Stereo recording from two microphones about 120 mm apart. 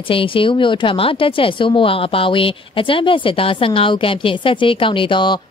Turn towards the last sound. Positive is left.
turn(degrees=45)  # may be behind; listen again after turning